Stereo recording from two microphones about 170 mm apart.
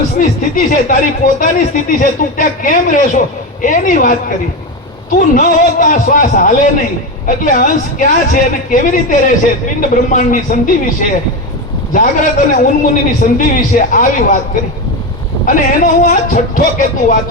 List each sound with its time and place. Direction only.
0.2 s speech: 55° left (ahead or behind)